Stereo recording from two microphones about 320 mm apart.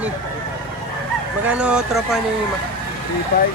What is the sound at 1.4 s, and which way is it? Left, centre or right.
Speech, centre.